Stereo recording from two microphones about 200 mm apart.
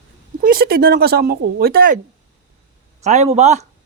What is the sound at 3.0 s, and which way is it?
Speech, 35° right (ahead or behind).